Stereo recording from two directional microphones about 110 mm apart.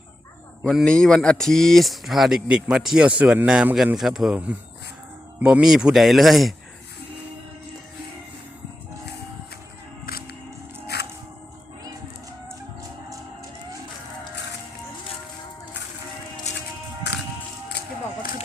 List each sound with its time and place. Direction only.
0.6 s a man's voice: 5° left (ahead or behind); by 3.9 s 15° right (ahead or behind)
3.9 s speech: centre (ahead or behind)